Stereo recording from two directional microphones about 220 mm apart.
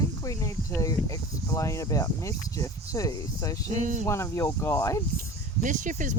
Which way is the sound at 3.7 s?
35° right (ahead or behind).